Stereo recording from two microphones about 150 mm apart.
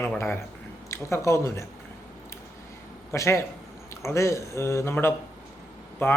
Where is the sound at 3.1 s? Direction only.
20° left (ahead or behind).